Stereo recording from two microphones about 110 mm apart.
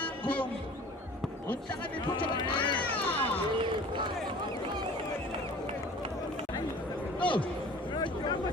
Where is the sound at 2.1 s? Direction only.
45° left (ahead or behind).